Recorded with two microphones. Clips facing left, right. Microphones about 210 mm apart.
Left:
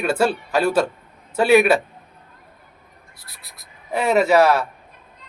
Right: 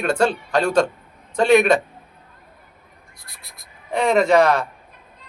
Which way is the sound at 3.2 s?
Centre (ahead or behind).